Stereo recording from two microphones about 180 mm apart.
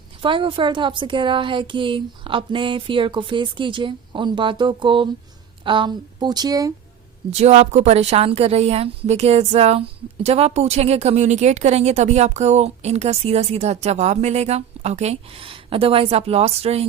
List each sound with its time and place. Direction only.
0.2 s a woman's voice: 30° right (ahead or behind)
7.3 s speech: 35° right (ahead or behind)